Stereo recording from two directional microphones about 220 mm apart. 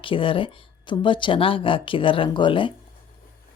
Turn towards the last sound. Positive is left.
turn(degrees=20)  # may be behind; listen again after turning